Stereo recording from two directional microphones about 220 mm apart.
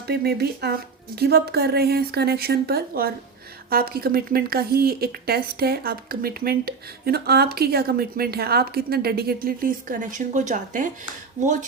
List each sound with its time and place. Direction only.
0.1 s speech: 45° right (ahead or behind); by 11.5 s 30° right (ahead or behind)